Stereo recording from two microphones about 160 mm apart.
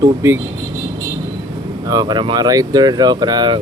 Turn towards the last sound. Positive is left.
turn(degrees=-25)  # may be behind; listen again after turning